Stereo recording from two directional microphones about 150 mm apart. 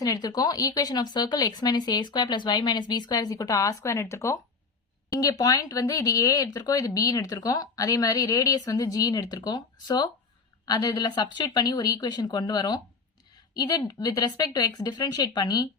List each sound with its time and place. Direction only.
0.0 s speech: 25° left (ahead or behind)